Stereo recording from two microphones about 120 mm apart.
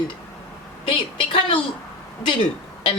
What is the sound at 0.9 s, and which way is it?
Speech, 50° left (ahead or behind).